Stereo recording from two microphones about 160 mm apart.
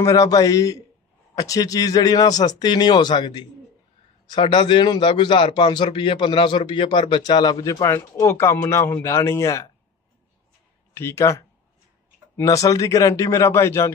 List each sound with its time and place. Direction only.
0.0 s a man's voice: 20° left (ahead or behind)
11.0 s speech: 15° left (ahead or behind)
12.6 s speech: 20° left (ahead or behind)